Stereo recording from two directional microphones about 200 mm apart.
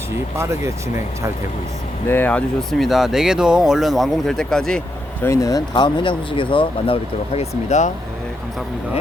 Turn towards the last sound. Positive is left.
turn(degrees=35)  # may be behind; listen again after turning